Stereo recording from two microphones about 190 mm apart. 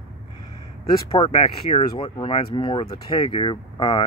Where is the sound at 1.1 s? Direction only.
35° left (ahead or behind).